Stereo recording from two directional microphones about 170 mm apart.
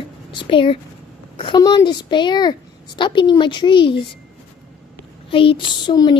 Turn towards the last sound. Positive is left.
turn(degrees=25)  # may be behind; listen again after turning